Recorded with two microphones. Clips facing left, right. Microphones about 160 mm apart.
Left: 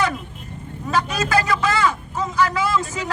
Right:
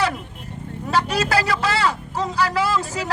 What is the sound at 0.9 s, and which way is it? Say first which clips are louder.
Vehicle: right 1 dB; 30° right (ahead or behind).